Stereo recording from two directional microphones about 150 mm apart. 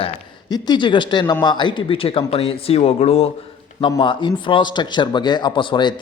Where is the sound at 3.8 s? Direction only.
30° left (ahead or behind).